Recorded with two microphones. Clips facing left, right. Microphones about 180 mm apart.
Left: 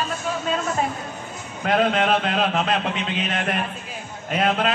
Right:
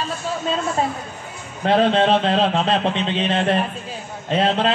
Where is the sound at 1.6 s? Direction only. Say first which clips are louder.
Right 4 dB; 30° right (ahead or behind).